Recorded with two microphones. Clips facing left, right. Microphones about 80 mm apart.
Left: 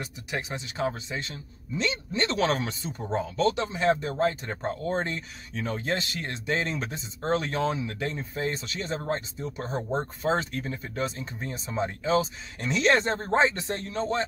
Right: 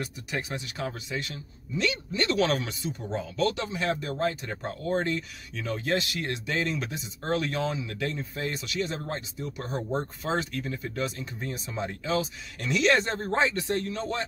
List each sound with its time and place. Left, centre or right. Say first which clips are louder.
0.0 s speech: even; left